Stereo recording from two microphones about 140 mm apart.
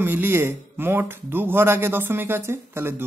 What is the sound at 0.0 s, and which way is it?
Speech, 15° right (ahead or behind).